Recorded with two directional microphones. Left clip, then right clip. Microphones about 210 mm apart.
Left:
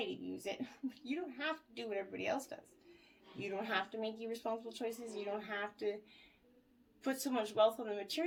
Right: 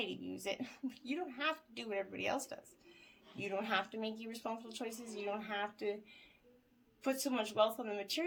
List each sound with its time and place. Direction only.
0.0 s speech: 40° right (ahead or behind)
7.0 s speech: 35° right (ahead or behind)